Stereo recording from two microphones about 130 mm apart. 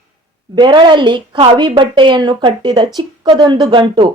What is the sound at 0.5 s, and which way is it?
A woman's voice, 35° right (ahead or behind).